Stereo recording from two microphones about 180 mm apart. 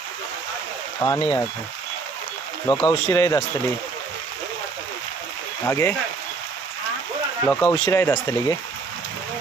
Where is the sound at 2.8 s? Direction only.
20° left (ahead or behind).